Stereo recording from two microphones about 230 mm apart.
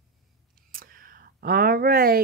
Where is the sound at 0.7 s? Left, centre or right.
Right.